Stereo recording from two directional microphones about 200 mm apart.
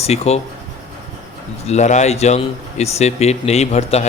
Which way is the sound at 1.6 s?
35° left (ahead or behind).